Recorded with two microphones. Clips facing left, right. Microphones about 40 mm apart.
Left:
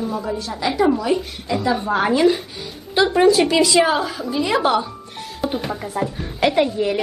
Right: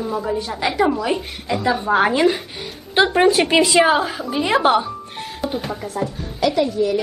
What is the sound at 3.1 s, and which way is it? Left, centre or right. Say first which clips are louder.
Speech: left 2 dB; right.